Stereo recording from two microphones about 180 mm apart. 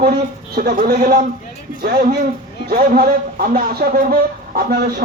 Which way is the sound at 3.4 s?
50° right (ahead or behind).